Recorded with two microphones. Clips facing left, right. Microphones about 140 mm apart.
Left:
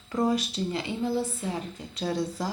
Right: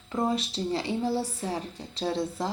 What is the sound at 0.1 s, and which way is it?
A woman's voice, 25° right (ahead or behind).